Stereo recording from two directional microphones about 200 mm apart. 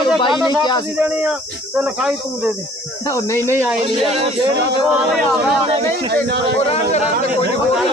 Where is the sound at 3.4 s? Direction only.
15° right (ahead or behind).